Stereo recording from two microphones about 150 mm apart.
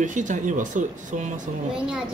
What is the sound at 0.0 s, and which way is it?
Speech, 55° right (ahead or behind).